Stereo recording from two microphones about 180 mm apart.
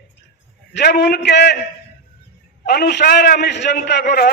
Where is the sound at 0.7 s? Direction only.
65° left (ahead or behind).